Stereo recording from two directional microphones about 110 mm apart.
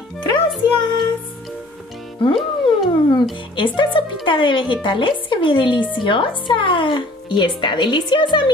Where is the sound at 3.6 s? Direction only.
50° left (ahead or behind).